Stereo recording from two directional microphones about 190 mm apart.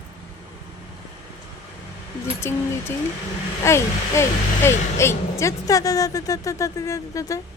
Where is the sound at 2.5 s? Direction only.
15° left (ahead or behind).